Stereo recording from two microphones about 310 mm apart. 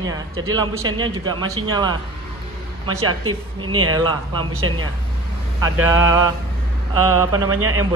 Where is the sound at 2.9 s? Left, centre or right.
Right.